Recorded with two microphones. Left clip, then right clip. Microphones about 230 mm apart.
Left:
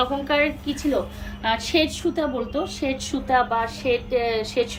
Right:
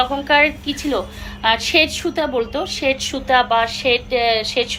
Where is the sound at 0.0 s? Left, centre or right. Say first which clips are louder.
Right 6 dB; centre.